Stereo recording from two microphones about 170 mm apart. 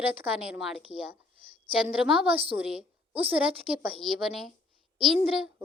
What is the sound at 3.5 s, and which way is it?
Speech, 35° right (ahead or behind).